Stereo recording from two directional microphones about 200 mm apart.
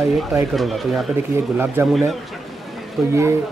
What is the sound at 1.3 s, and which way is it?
Speech, 15° right (ahead or behind).